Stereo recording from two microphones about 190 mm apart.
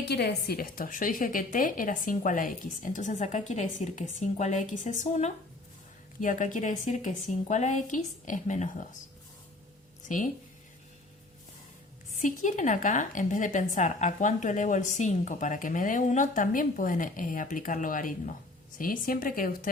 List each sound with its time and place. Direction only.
0.1 s a woman's voice: 60° left (ahead or behind); by 9.0 s 40° left (ahead or behind)
10.1 s a woman's voice: 45° left (ahead or behind)
12.2 s a woman's voice: 40° left (ahead or behind)